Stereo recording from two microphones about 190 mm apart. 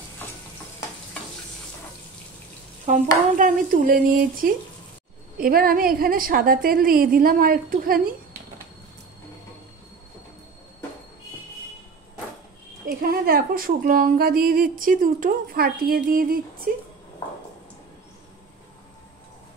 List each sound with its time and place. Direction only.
2.9 s a woman's voice: 45° right (ahead or behind)
12.8 s a woman's voice: 50° right (ahead or behind)